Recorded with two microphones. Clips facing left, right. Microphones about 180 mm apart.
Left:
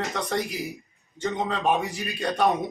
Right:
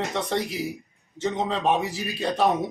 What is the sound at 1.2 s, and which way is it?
A man's voice, 5° right (ahead or behind).